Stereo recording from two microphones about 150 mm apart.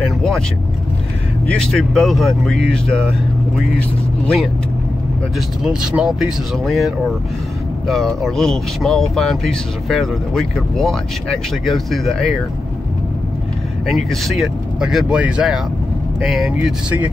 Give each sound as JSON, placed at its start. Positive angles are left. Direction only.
{"t": 0.0, "sound": "vehicle", "side_deg": 0}
{"t": 1.5, "sound": "speech", "side_deg": 5}
{"t": 5.6, "sound": "speech", "side_deg": -5}
{"t": 13.8, "sound": "speech", "side_deg": 0}